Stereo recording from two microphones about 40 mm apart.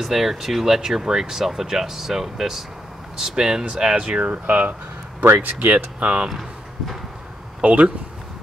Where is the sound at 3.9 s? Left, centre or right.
Right.